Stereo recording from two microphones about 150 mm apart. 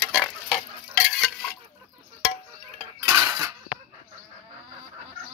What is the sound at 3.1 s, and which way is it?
Cutlery, 20° right (ahead or behind).